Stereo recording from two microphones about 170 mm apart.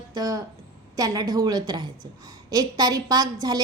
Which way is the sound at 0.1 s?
20° right (ahead or behind).